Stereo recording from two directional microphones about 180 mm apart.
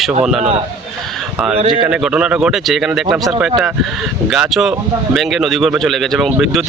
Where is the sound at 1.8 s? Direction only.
5° right (ahead or behind).